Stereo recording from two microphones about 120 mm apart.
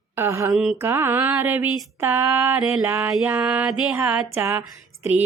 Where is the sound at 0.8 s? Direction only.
20° right (ahead or behind).